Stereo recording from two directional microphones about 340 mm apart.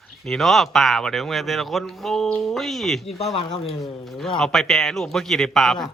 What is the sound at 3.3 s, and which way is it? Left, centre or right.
Speech, centre.